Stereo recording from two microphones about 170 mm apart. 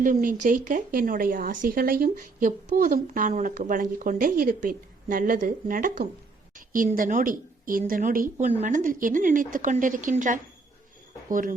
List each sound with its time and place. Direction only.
0.0 s speech: 55° right (ahead or behind)